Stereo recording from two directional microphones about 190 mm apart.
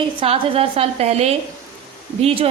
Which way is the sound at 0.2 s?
30° right (ahead or behind).